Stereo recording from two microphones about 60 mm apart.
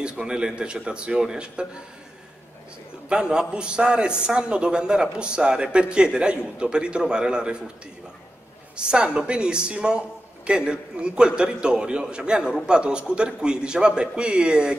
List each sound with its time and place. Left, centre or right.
0.0 s a man's voice: centre
3.1 s a man's voice: centre
8.7 s a man's voice: centre